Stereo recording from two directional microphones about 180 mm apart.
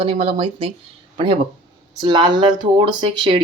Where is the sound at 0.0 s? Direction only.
30° right (ahead or behind).